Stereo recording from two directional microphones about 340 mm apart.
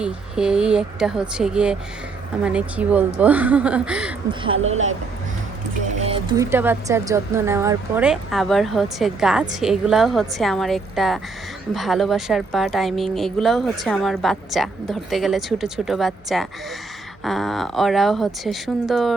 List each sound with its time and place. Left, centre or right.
0.0 s speech: centre
4.5 s speech: right
6.1 s speech: centre